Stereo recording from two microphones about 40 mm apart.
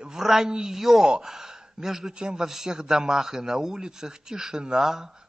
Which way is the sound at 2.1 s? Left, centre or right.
Right.